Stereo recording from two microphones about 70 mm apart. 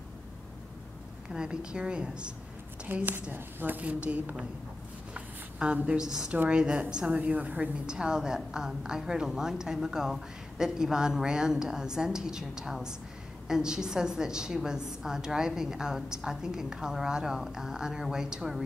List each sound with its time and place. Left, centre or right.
1.3 s a woman's voice: centre
2.9 s a woman's voice: right
5.1 s a sound: centre
6.5 s a woman's voice: centre